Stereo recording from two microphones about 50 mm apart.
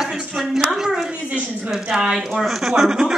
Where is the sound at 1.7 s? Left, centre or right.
Centre.